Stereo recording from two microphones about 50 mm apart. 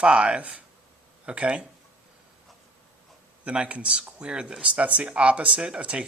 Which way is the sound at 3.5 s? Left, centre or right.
Right.